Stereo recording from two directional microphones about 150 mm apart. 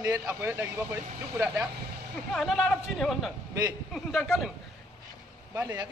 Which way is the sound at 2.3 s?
5° left (ahead or behind).